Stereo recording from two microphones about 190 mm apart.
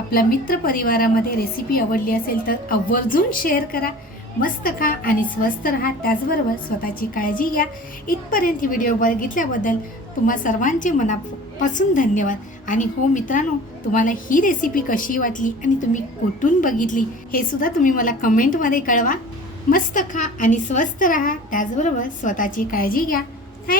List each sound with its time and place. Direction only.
0.1 s a woman's voice: 50° left (ahead or behind)